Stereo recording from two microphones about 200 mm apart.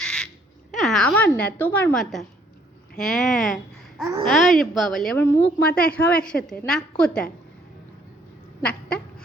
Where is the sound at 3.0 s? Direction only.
Centre (ahead or behind).